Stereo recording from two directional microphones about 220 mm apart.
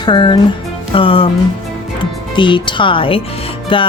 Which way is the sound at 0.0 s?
20° left (ahead or behind).